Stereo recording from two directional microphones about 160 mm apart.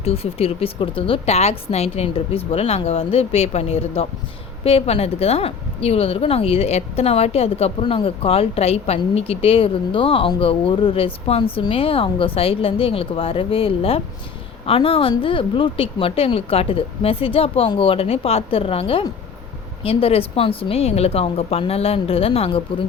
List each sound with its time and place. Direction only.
0.0 s a woman's voice: 40° left (ahead or behind)